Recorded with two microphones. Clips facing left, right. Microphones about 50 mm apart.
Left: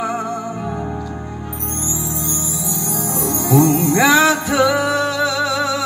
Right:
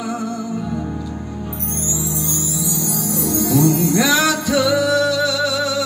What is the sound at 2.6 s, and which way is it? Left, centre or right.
Music, left.